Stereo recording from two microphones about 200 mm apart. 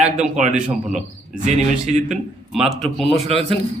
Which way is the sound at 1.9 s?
35° right (ahead or behind).